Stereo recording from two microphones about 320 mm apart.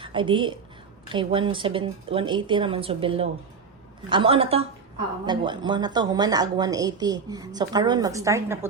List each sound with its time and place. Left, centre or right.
0.0 s a woman's voice: centre